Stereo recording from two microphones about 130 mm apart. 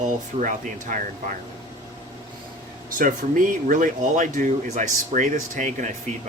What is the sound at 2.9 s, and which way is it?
Speech, 90° right.